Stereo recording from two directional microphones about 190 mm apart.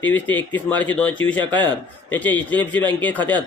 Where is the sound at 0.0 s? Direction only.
10° left (ahead or behind).